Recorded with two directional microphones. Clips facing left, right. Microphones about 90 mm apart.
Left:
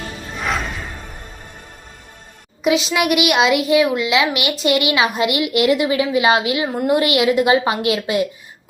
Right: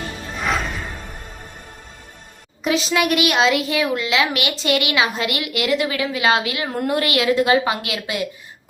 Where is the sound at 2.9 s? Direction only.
15° left (ahead or behind).